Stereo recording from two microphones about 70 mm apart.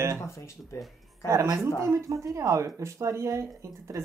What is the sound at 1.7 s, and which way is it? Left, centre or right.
Speech, right.